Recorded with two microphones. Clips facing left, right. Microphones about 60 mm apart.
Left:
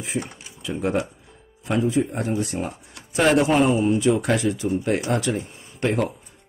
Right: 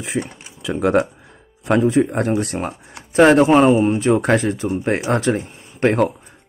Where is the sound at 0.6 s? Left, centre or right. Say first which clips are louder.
Right 7 dB; right.